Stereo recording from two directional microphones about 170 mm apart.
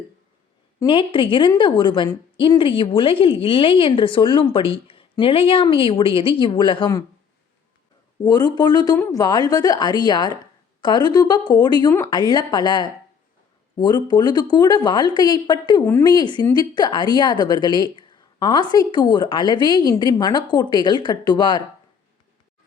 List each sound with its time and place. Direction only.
0.9 s a woman's voice: 30° left (ahead or behind)
8.2 s a woman's voice: 20° left (ahead or behind)